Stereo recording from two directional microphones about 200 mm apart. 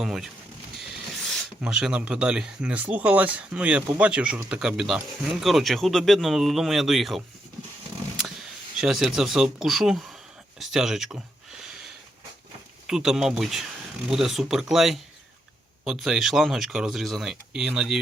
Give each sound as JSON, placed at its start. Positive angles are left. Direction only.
{"t": 0.0, "sound": "speech", "side_deg": 0}
{"t": 1.3, "sound": "speech", "side_deg": 0}
{"t": 10.6, "sound": "a sound", "side_deg": 0}
{"t": 12.9, "sound": "speech", "side_deg": 0}